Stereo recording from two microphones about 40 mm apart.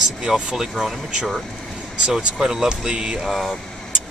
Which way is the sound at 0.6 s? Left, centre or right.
Centre.